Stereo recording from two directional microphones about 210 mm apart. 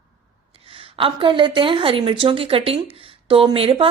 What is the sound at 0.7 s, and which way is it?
A woman's voice, 25° right (ahead or behind).